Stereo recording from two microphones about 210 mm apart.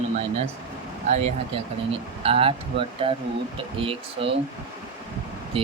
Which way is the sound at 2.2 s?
25° right (ahead or behind).